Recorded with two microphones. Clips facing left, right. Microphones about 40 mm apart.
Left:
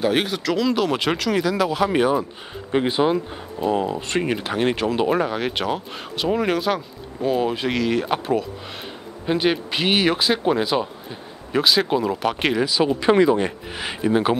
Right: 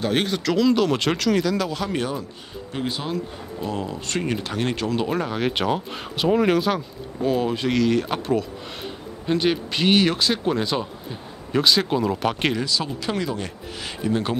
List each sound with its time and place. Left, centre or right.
0.0 s speech: centre
2.7 s speech: left; by 12.5 s centre
12.5 s speech: centre